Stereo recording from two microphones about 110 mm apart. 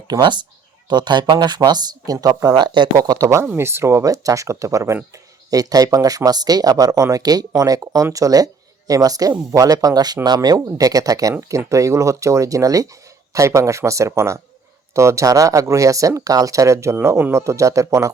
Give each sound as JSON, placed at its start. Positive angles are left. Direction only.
{"t": 0.1, "sound": "speech", "side_deg": -45}